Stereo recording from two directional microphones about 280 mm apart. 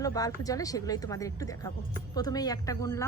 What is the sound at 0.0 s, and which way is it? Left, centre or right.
A woman's voice, centre.